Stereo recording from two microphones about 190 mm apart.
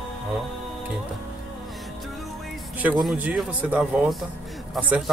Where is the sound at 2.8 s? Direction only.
5° right (ahead or behind).